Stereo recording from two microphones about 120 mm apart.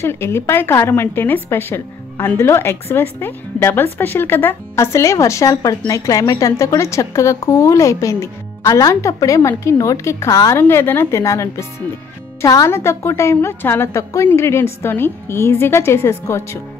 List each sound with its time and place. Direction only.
0.0 s a woman's voice: 20° left (ahead or behind)